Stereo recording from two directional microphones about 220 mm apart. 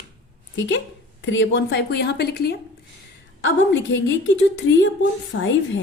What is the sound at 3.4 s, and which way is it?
A woman's voice, 60° left (ahead or behind).